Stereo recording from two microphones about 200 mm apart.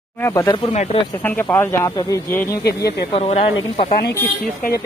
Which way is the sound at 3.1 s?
30° left (ahead or behind).